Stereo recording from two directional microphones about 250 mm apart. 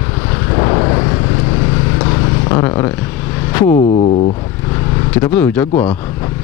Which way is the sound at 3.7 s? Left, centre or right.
Left.